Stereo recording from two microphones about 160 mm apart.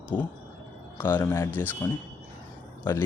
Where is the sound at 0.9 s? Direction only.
15° left (ahead or behind).